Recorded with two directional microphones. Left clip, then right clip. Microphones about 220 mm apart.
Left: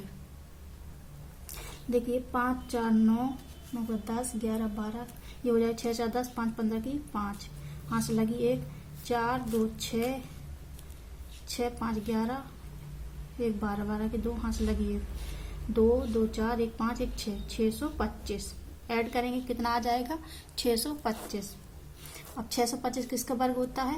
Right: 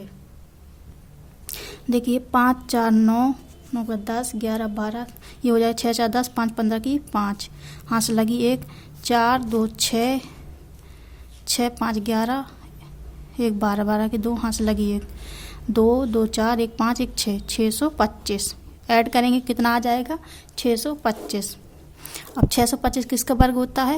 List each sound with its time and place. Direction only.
1.5 s a woman's voice: 45° right (ahead or behind)
11.4 s a woman's voice: 45° right (ahead or behind)